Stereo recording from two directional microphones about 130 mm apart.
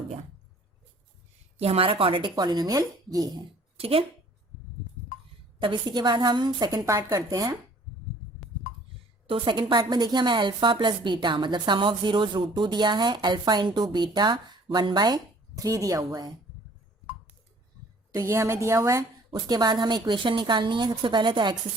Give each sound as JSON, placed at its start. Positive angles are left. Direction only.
{"t": 1.6, "sound": "a woman's voice", "side_deg": -45}
{"t": 3.8, "sound": "speech", "side_deg": -50}
{"t": 5.5, "sound": "a woman's voice", "side_deg": -35}
{"t": 9.3, "sound": "a woman's voice", "side_deg": -40}
{"t": 18.1, "sound": "a woman's voice", "side_deg": -25}